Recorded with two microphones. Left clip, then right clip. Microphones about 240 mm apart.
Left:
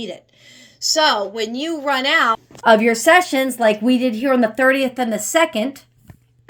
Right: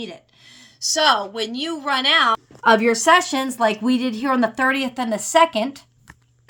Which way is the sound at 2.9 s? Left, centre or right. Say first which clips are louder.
Left 2 dB; right.